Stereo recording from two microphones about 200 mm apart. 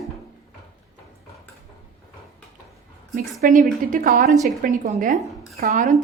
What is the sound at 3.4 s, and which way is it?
A woman's voice, 45° right (ahead or behind).